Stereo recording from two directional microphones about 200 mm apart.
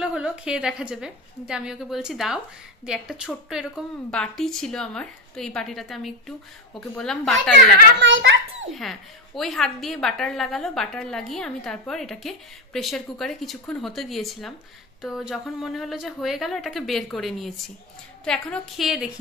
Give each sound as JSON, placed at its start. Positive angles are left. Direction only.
{"t": 0.0, "sound": "a woman's voice", "side_deg": -5}
{"t": 8.0, "sound": "a child's voice", "side_deg": -65}
{"t": 8.6, "sound": "a woman's voice", "side_deg": 0}